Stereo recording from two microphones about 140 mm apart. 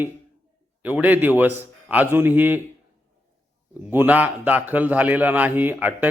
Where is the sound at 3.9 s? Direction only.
15° right (ahead or behind).